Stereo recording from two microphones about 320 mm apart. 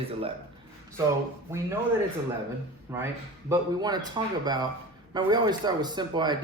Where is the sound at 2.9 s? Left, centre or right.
Centre.